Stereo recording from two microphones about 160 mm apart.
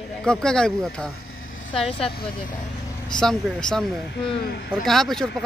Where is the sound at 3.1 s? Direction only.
5° left (ahead or behind).